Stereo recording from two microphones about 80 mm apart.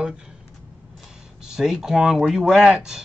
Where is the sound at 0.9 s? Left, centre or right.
Centre.